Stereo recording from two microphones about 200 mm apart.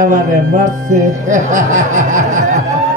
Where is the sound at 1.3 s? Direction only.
40° right (ahead or behind).